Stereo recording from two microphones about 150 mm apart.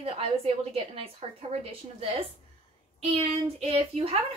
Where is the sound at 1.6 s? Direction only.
40° right (ahead or behind).